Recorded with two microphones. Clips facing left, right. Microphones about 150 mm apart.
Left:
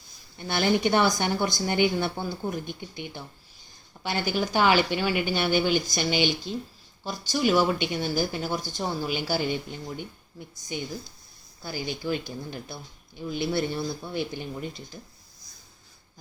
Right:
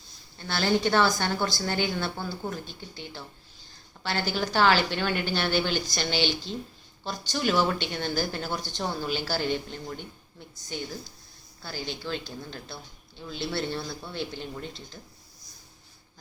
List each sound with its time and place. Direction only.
0.3 s a woman's voice: 15° left (ahead or behind)